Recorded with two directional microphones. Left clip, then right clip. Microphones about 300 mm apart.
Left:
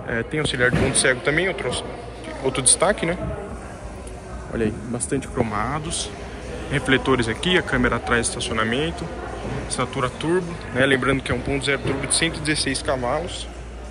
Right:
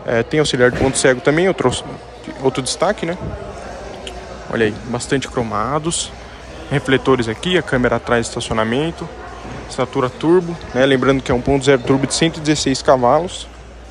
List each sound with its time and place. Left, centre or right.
0.0 s a man's voice: centre
4.6 s a man's voice: centre